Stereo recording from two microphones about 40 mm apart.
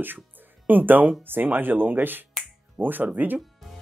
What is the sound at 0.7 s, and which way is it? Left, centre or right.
Speech, right.